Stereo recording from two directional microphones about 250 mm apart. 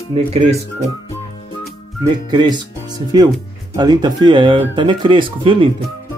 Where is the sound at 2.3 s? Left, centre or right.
Centre.